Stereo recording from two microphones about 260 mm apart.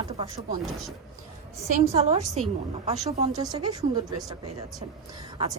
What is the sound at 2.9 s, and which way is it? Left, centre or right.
Speech, centre.